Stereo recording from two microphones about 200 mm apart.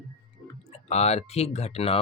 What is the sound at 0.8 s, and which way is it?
Speech, 30° left (ahead or behind).